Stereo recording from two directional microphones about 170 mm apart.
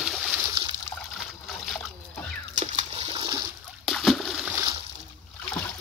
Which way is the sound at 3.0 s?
30° right (ahead or behind).